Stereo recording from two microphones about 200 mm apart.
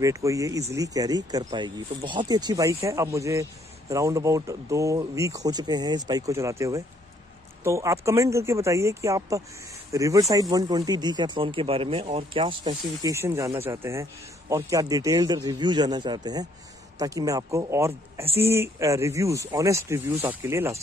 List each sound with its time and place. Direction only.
0.0 s speech: 15° right (ahead or behind)
7.6 s speech: 15° right (ahead or behind)